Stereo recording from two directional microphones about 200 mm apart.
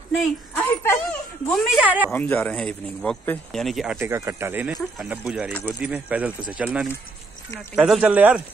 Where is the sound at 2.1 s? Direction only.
10° left (ahead or behind).